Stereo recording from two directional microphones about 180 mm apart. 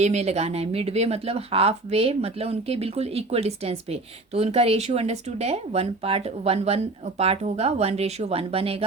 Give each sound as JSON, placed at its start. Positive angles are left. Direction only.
{"t": 0.0, "sound": "speech", "side_deg": -35}